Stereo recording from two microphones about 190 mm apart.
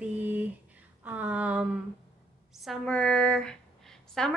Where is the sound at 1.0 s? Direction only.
10° right (ahead or behind).